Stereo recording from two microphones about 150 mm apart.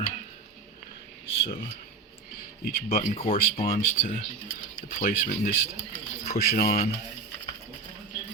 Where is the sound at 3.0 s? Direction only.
40° left (ahead or behind).